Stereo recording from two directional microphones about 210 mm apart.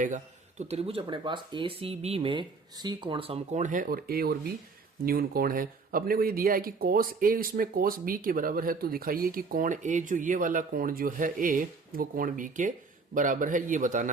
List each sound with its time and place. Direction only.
0.7 s a man's voice: 30° right (ahead or behind)